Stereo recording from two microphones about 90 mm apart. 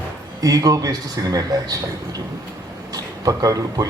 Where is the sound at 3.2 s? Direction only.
45° right (ahead or behind).